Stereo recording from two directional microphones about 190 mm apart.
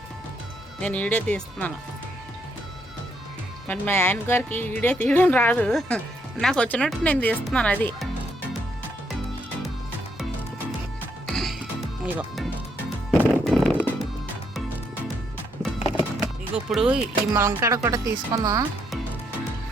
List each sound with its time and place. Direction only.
0.8 s speech: 5° left (ahead or behind)
3.7 s speech: 10° left (ahead or behind)
11.3 s music: centre (ahead or behind)
12.0 s speech: 10° right (ahead or behind)
13.1 s music: centre (ahead or behind)
16.2 s speech: 5° right (ahead or behind)